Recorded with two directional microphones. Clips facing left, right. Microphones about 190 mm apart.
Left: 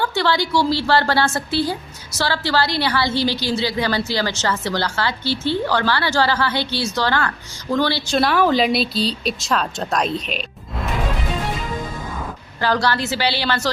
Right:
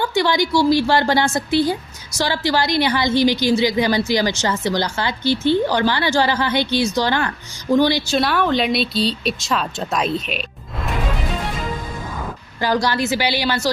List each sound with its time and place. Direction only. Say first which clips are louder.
0.0 s a woman's voice: right 2 dB; 15° right (ahead or behind)
8.0 s speech: left 1 dB; centre (ahead or behind)
12.5 s a woman's voice: right 1 dB; 15° right (ahead or behind)